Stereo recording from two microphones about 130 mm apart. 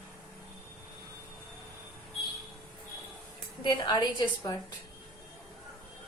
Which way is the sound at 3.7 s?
35° left (ahead or behind).